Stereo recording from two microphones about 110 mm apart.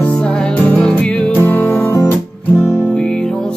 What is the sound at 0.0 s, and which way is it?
Music, 10° left (ahead or behind).